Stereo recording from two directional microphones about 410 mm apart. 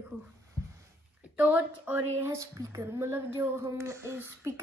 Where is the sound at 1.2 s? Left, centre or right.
Centre.